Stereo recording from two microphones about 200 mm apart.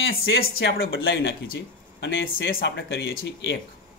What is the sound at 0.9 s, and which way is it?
A man's voice, 70° left (ahead or behind).